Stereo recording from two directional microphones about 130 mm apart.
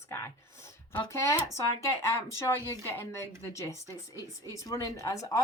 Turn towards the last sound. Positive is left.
turn(degrees=25)  # may be behind; listen again after turning